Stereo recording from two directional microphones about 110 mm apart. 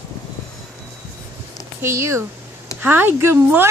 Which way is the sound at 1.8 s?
25° right (ahead or behind).